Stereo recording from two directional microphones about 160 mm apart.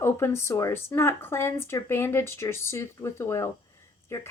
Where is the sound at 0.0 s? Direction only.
15° left (ahead or behind).